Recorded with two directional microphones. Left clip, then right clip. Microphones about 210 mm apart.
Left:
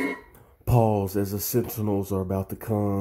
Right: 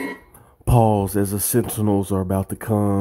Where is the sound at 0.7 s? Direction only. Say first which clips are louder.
Right 5 dB; 20° right (ahead or behind).